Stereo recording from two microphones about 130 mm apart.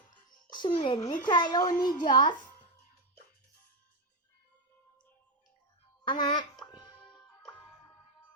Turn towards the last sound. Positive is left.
turn(degrees=35)  # may be behind; listen again after turning